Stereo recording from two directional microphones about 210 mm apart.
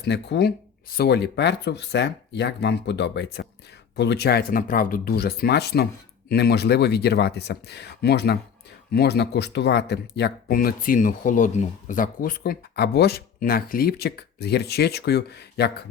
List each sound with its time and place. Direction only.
0.0 s speech: 55° left (ahead or behind)